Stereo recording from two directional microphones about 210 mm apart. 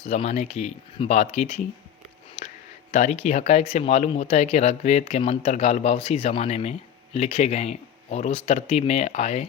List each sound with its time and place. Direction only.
0.0 s speech: 30° left (ahead or behind)
2.9 s speech: 30° left (ahead or behind)